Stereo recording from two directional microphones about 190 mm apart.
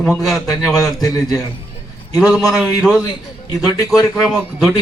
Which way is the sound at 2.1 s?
Centre (ahead or behind).